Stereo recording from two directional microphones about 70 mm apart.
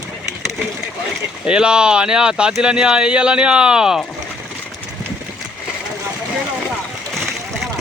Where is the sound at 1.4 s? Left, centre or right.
Centre.